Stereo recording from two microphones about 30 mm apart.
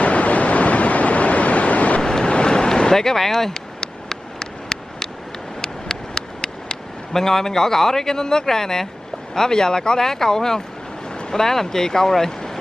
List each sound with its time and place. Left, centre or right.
0.0 s waves: left
2.0 s boat: left
3.8 s a sound: left
5.6 s vehicle: left
7.1 s speech: centre